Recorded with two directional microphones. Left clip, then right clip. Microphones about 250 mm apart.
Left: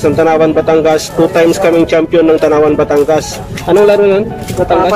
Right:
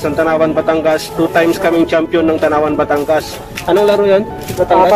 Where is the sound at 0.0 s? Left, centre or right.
Centre.